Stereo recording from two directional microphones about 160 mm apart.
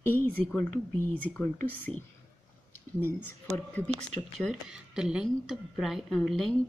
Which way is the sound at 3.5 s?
10° left (ahead or behind).